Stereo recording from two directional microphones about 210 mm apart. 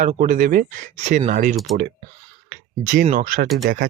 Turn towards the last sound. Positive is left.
turn(degrees=-45)  # may be behind; listen again after turning